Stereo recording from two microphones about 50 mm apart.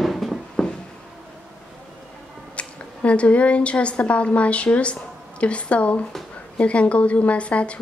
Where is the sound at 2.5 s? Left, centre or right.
Left.